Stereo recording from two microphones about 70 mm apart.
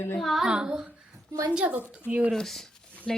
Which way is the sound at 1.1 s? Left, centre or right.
Right.